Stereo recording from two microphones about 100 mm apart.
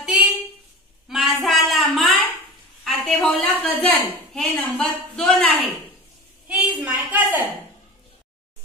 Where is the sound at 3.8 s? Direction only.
10° left (ahead or behind).